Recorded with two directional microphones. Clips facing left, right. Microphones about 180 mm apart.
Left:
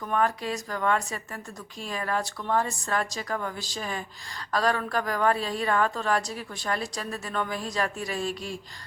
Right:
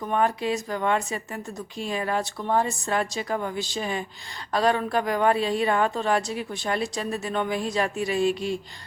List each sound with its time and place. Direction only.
0.1 s a woman's voice: 25° right (ahead or behind)